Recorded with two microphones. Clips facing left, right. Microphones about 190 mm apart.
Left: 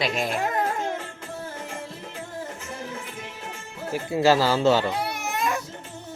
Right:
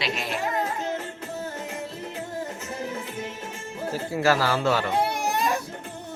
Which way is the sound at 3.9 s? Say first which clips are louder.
Left 3 dB; 20° left (ahead or behind).